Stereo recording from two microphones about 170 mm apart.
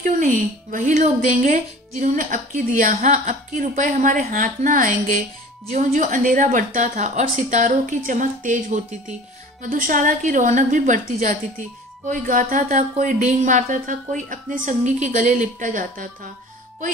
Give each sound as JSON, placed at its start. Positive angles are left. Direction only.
{"t": 0.0, "sound": "speech", "side_deg": -50}